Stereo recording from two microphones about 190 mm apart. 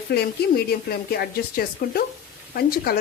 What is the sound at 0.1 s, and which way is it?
Speech, 55° left (ahead or behind).